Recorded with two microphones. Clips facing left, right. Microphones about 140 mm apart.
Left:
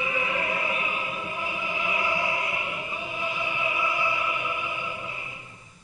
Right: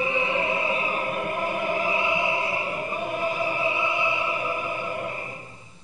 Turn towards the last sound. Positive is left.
turn(degrees=-45)  # may be behind; listen again after turning